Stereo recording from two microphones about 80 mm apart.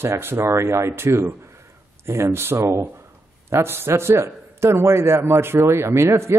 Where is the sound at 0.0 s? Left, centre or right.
Right.